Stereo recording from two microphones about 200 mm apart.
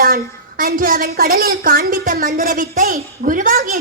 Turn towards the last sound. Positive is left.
turn(degrees=-40)  # may be behind; listen again after turning